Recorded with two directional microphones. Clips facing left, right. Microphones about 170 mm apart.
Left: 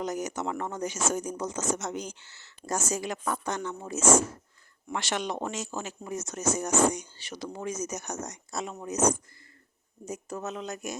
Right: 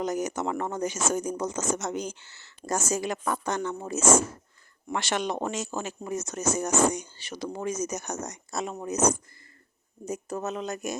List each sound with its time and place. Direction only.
0.0 s speech: 45° right (ahead or behind)